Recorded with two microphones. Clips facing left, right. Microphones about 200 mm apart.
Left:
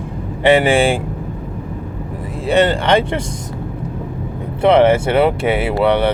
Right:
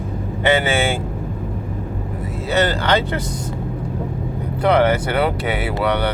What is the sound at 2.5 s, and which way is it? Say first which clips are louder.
Speech: left 5 dB; 30° left (ahead or behind).